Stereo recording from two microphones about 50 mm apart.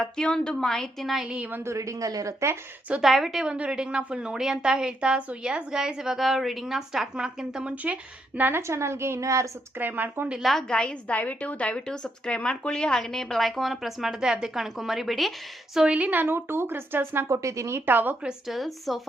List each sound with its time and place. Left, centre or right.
0.0 s a woman's voice: centre
1.2 s a woman's voice: centre
1.6 s speech: right
3.0 s speech: centre
3.4 s a woman's voice: centre
8.4 s speech: right
8.6 s a woman's voice: right
9.7 s speech: right
10.4 s speech: centre
10.7 s a woman's voice: left; by 15.3 s centre
15.9 s speech: right
17.2 s speech: right
17.8 s speech: right
18.4 s speech: centre